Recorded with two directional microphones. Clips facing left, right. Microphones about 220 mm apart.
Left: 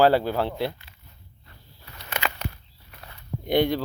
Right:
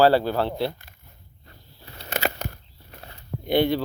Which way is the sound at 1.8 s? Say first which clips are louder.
Right 4 dB; 35° right (ahead or behind).